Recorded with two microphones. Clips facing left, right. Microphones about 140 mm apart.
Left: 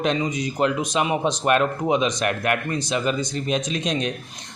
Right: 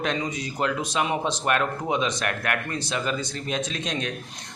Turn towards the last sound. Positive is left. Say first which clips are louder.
# left 5 dB
turn(degrees=20)  # may be behind; listen again after turning